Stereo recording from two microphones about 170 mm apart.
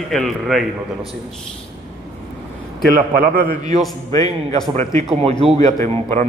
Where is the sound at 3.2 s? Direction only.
60° right (ahead or behind).